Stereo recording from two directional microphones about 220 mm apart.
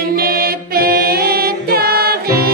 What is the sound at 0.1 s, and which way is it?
Music, 45° right (ahead or behind).